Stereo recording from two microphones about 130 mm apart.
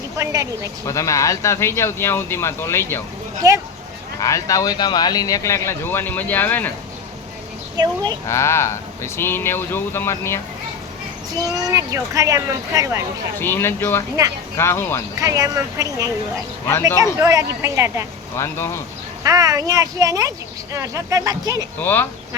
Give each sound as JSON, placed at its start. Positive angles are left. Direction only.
{"t": 0.2, "sound": "speech", "side_deg": -25}
{"t": 0.9, "sound": "speech", "side_deg": 25}
{"t": 3.4, "sound": "speech", "side_deg": -25}
{"t": 4.2, "sound": "speech", "side_deg": 25}
{"t": 7.8, "sound": "speech", "side_deg": -30}
{"t": 8.3, "sound": "speech", "side_deg": 20}
{"t": 11.5, "sound": "speech", "side_deg": -25}
{"t": 13.4, "sound": "speech", "side_deg": 15}
{"t": 15.2, "sound": "speech", "side_deg": -25}
{"t": 18.3, "sound": "speech", "side_deg": 20}
{"t": 19.2, "sound": "speech", "side_deg": -25}
{"t": 21.8, "sound": "speech", "side_deg": 15}